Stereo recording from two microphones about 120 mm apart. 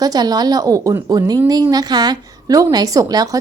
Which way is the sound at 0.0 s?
30° right (ahead or behind).